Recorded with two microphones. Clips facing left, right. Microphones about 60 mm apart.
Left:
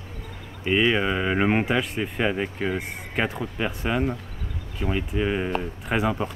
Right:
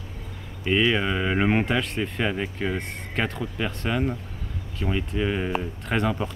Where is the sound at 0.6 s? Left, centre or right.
Centre.